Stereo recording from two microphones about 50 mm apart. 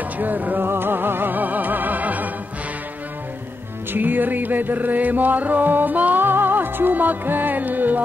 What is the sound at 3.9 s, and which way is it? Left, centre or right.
Music, right.